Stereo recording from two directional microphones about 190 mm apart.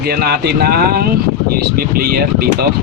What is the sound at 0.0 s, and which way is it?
Speech, 55° right (ahead or behind).